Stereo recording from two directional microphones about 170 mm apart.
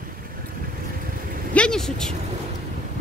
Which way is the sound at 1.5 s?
5° left (ahead or behind).